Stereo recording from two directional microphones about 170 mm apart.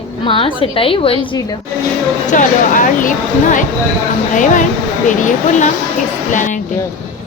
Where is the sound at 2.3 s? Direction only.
50° left (ahead or behind).